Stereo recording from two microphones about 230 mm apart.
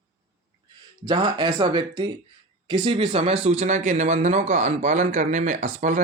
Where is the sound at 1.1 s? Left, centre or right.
Centre.